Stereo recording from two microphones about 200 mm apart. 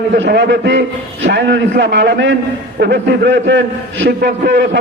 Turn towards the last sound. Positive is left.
turn(degrees=-50)  # may be behind; listen again after turning